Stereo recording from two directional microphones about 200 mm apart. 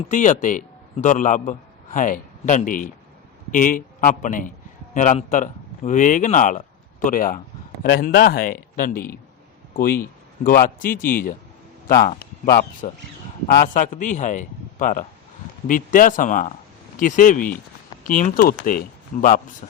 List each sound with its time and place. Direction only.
0.1 s a man's voice: 40° left (ahead or behind)